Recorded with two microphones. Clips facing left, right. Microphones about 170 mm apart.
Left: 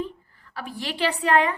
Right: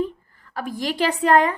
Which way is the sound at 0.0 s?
45° right (ahead or behind).